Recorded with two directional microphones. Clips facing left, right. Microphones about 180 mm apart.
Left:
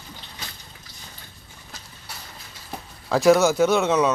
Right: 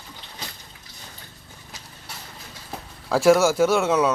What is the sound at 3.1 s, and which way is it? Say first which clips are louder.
Speech: even; 10° right (ahead or behind).